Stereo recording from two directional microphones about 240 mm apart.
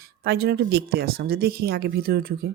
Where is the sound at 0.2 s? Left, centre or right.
Right.